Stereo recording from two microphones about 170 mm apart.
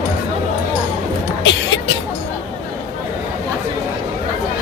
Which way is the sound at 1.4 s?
90° left.